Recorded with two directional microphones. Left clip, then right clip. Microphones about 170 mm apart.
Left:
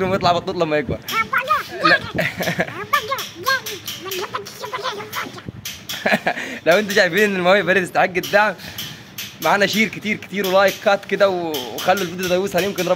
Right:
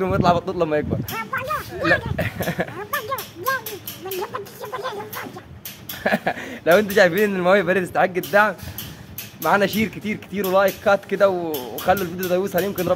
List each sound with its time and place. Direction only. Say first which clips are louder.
0.0 s speech: left 1 dB; 10° left (ahead or behind)
1.1 s a sound: left 8 dB; 25° right (ahead or behind)
2.1 s speech: left 4 dB; 10° left (ahead or behind)
2.9 s children playing: left 6 dB; 25° right (ahead or behind)
4.2 s chicken: left 2 dB; 25° right (ahead or behind)
6.0 s speech: left 3 dB; 15° left (ahead or behind)